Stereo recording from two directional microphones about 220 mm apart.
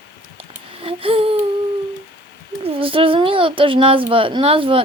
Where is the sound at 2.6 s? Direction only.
25° right (ahead or behind).